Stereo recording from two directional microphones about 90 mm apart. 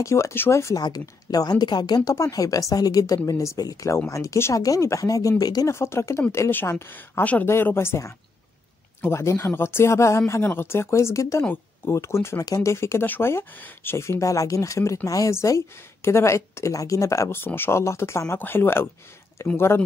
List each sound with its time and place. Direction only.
0.0 s speech: 35° left (ahead or behind)
0.8 s speech: 45° left (ahead or behind)
5.7 s speech: 30° left (ahead or behind)